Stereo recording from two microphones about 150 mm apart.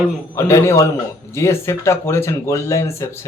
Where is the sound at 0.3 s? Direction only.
15° left (ahead or behind).